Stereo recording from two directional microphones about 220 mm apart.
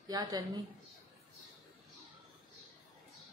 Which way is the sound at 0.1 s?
15° right (ahead or behind).